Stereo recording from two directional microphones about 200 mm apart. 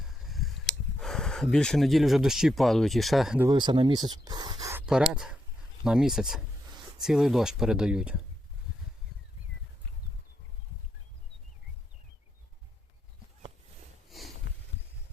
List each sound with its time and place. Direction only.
0.0 s a sound: centre (ahead or behind)
0.9 s speech: centre (ahead or behind)
3.4 s speech: 20° right (ahead or behind); by 8.2 s 5° right (ahead or behind)
14.1 s sniff: centre (ahead or behind)